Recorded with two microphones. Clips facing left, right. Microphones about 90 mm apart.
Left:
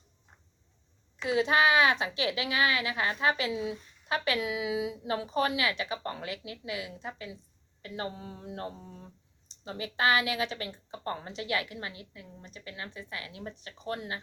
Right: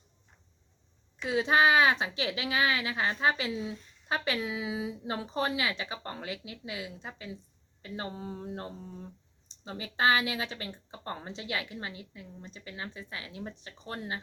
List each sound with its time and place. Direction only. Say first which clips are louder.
1.3 s speech: even; 25° right (ahead or behind)
9.6 s speech: even; 25° right (ahead or behind)